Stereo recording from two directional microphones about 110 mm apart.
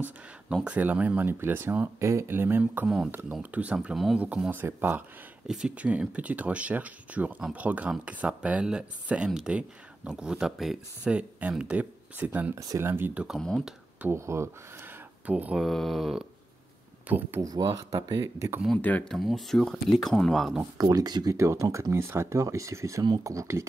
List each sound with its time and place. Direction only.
0.7 s speech: 15° right (ahead or behind)
4.3 s speech: 15° right (ahead or behind)
5.5 s speech: 10° right (ahead or behind)
12.5 s speech: 30° right (ahead or behind); by 13.4 s 10° right (ahead or behind)
13.4 s speech: 5° left (ahead or behind)
14.0 s speech: 25° right (ahead or behind)
15.2 s speech: 15° right (ahead or behind)
15.6 s speech: centre (ahead or behind)
17.4 s speech: 35° right (ahead or behind)
18.8 s speech: 15° left (ahead or behind)
19.1 s speech: centre (ahead or behind)
20.7 s speech: 35° right (ahead or behind)